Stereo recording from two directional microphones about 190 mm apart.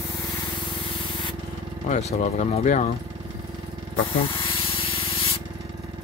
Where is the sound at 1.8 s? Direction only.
40° left (ahead or behind).